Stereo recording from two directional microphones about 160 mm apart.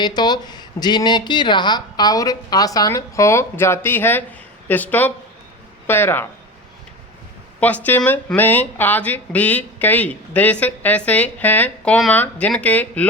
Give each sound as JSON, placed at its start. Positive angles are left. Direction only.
{"t": 0.0, "sound": "speech", "side_deg": 25}
{"t": 7.6, "sound": "speech", "side_deg": 10}